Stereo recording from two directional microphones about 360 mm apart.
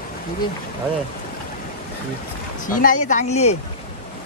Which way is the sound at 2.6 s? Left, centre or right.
Left.